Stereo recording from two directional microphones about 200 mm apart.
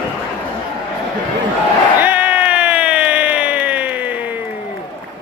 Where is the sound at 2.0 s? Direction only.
5° right (ahead or behind).